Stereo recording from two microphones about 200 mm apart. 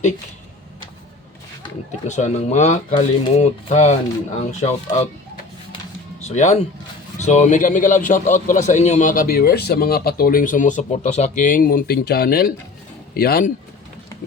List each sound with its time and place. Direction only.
2.0 s a man's voice: 35° left (ahead or behind)
6.2 s a man's voice: 35° left (ahead or behind)